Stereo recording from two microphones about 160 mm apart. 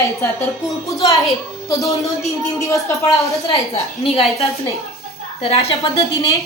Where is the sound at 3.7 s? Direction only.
40° left (ahead or behind).